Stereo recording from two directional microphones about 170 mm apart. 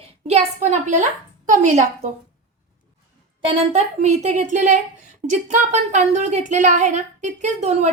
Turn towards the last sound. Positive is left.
turn(degrees=-40)  # may be behind; listen again after turning